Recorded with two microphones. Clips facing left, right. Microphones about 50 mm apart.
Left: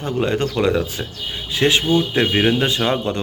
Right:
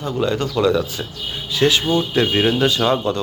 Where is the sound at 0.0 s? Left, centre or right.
Left.